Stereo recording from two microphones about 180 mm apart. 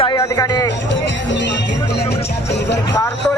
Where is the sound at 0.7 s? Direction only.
80° left.